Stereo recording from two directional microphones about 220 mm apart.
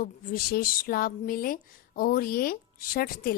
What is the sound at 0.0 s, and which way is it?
A woman's voice, 40° left (ahead or behind).